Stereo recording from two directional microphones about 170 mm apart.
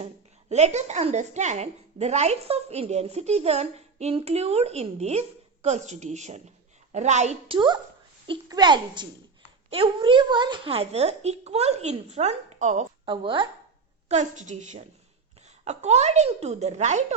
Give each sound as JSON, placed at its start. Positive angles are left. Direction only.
{"t": 0.5, "sound": "a woman's voice", "side_deg": -40}
{"t": 13.1, "sound": "a woman's voice", "side_deg": -30}
{"t": 14.1, "sound": "a woman's voice", "side_deg": -45}